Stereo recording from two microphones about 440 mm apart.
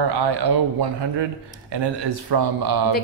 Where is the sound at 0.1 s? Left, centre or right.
Right.